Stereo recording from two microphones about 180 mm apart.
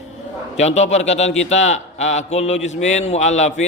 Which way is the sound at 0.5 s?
40° left (ahead or behind).